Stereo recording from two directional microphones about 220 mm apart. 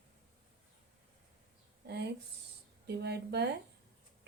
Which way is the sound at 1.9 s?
50° right (ahead or behind).